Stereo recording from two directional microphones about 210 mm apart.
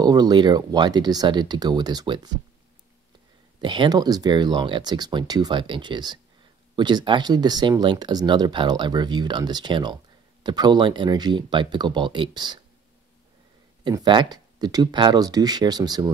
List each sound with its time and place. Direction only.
0.0 s speech: 20° right (ahead or behind)
3.6 s speech: 20° right (ahead or behind)
13.8 s speech: 20° right (ahead or behind)